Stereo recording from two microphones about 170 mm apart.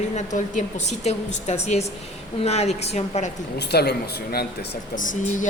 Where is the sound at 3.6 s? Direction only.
75° left (ahead or behind).